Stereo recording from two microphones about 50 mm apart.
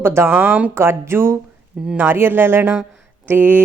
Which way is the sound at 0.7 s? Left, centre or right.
Right.